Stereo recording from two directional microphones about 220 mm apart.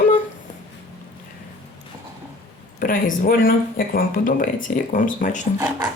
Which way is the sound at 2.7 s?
40° left (ahead or behind).